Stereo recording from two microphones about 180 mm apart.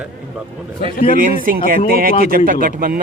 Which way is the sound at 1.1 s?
50° right (ahead or behind).